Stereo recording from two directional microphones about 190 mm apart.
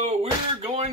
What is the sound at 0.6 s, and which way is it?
Speech, 35° right (ahead or behind).